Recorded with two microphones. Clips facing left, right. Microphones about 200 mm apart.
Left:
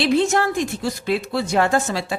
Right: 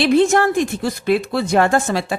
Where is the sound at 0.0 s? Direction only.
55° right (ahead or behind).